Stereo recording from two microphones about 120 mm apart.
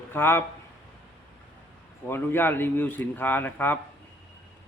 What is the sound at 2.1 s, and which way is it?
A man's voice, 20° left (ahead or behind).